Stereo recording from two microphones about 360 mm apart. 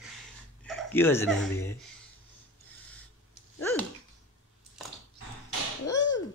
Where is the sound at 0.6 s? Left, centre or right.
Centre.